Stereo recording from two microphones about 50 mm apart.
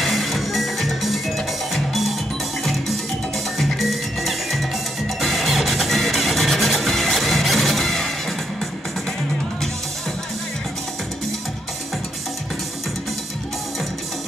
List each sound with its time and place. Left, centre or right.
0.0 s music: centre
3.5 s music: centre